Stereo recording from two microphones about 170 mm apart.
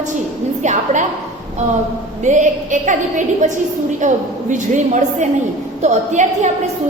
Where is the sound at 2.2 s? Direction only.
45° right (ahead or behind).